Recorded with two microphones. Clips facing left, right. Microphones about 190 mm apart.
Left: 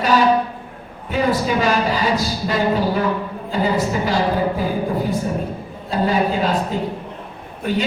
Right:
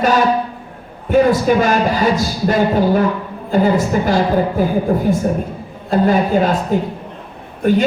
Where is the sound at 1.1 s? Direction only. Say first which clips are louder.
Right 7 dB; 50° right (ahead or behind).